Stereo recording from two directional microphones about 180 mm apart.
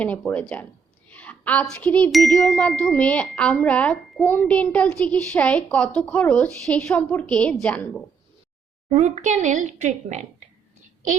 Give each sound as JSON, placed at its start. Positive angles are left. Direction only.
{"t": 0.0, "sound": "a sound", "side_deg": 10}
{"t": 7.1, "sound": "a woman's voice", "side_deg": 5}
{"t": 8.9, "sound": "a woman's voice", "side_deg": -40}